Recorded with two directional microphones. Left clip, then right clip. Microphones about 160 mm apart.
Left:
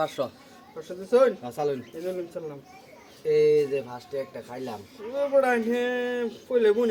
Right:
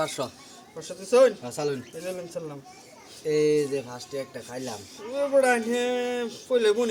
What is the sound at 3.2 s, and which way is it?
Speech, 20° left (ahead or behind).